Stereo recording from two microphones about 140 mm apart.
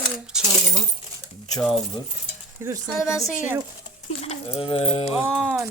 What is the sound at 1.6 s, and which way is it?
Speech, centre (ahead or behind).